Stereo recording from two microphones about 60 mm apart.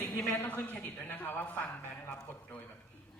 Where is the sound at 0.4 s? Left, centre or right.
Left.